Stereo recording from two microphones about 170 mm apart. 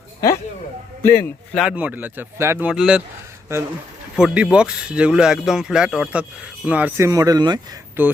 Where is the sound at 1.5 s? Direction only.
Centre (ahead or behind).